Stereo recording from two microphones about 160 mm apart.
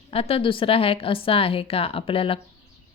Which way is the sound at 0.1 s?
35° left (ahead or behind).